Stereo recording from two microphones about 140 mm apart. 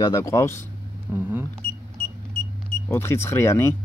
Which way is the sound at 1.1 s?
15° right (ahead or behind).